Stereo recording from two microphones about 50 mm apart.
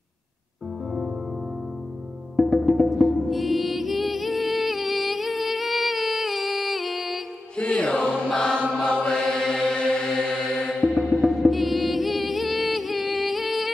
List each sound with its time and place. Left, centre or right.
2.3 s music: centre
7.7 s music: centre
8.3 s chant: centre
11.1 s music: centre